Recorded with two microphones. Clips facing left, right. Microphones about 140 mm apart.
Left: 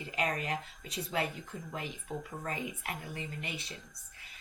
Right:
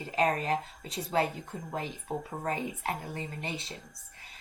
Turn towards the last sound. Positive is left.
turn(degrees=-30)  # may be behind; listen again after turning